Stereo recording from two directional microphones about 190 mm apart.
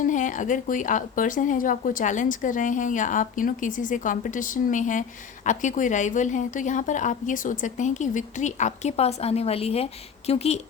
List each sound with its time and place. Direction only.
0.0 s speech: 40° left (ahead or behind)